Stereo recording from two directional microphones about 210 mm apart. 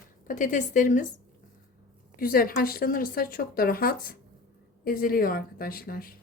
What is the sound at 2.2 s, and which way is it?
Speech, 45° left (ahead or behind).